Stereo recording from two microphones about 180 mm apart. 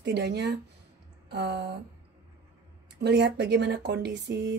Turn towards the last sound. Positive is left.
turn(degrees=-70)  # may be behind; listen again after turning